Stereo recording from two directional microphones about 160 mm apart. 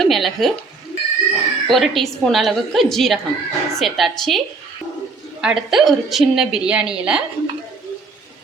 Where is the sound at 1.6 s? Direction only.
Centre (ahead or behind).